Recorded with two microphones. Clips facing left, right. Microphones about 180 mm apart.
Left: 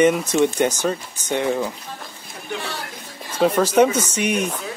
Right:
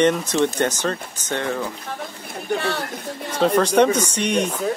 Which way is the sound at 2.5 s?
60° right (ahead or behind).